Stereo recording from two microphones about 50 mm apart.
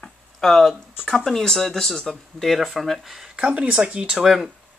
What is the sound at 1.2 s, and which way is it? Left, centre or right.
Speech, centre.